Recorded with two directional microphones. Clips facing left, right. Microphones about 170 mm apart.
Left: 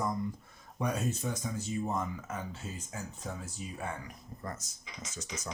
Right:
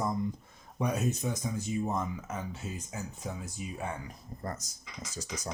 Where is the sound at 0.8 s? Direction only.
15° right (ahead or behind).